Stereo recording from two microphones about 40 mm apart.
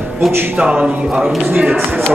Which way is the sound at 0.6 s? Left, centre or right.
Right.